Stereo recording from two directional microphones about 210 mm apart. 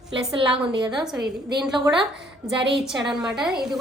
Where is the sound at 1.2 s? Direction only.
50° right (ahead or behind).